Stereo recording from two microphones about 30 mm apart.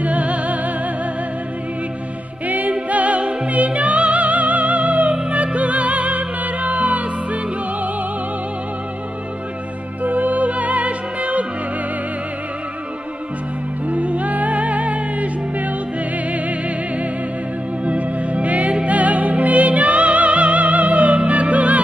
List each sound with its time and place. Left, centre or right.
0.0 s music: right
2.4 s music: right
2.9 s music: right
10.0 s music: right
13.8 s music: right